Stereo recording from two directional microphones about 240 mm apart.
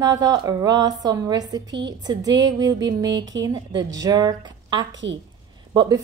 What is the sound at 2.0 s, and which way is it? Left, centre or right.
A woman's voice, centre.